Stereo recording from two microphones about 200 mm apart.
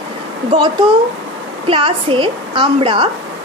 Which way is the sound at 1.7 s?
25° right (ahead or behind).